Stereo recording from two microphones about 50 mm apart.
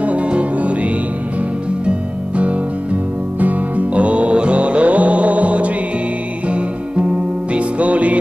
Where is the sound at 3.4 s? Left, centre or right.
Right.